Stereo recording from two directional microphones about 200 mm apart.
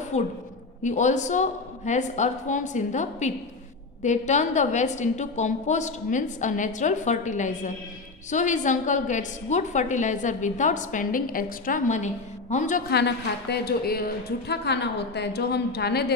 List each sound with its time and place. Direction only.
0.1 s a woman's voice: 35° left (ahead or behind)
12.9 s a woman's voice: 55° left (ahead or behind)